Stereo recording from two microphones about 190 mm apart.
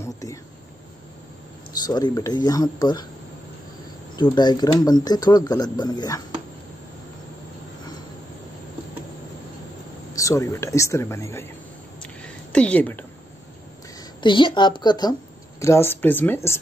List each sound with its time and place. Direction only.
0.0 s a sound: 15° left (ahead or behind)
1.8 s speech: 20° left (ahead or behind)
4.2 s speech: 20° left (ahead or behind)
10.1 s speech: 15° left (ahead or behind)
12.0 s a sound: 5° left (ahead or behind)
14.2 s speech: 25° left (ahead or behind)